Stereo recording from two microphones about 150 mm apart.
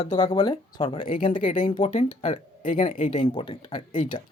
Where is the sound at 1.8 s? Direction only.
50° left (ahead or behind).